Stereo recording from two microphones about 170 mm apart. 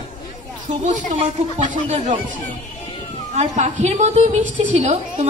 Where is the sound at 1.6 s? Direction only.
45° right (ahead or behind).